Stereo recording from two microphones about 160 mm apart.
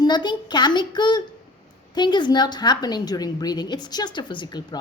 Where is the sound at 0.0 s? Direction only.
30° left (ahead or behind).